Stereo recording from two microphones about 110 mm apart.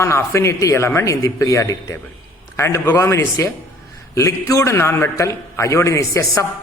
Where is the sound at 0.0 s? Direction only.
25° left (ahead or behind).